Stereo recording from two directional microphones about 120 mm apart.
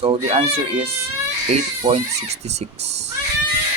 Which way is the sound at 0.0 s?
55° right (ahead or behind).